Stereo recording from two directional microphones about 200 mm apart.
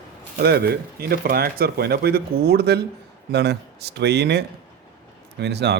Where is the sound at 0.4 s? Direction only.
50° right (ahead or behind).